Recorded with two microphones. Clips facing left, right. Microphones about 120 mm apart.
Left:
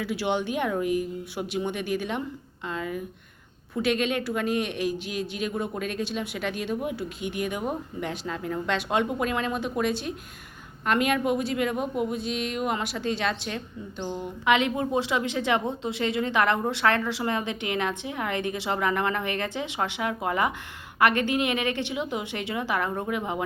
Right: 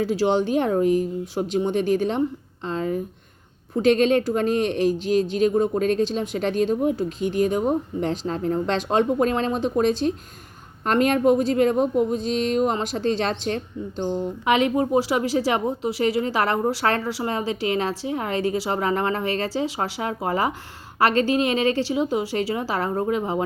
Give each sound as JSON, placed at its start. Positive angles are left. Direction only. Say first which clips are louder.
{"t": 0.0, "sound": "a woman's voice", "louder": "right 7 dB", "side_deg": -40}